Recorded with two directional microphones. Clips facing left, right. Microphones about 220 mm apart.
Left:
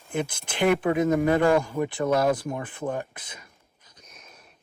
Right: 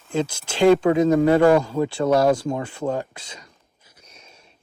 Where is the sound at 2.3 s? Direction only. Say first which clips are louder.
Right 5 dB; 50° right (ahead or behind).